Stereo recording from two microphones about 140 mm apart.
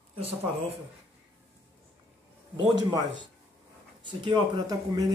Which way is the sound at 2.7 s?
35° right (ahead or behind).